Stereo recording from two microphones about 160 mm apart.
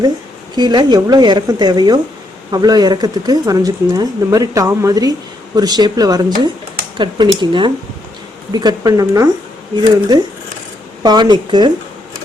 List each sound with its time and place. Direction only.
0.5 s speech: 25° right (ahead or behind)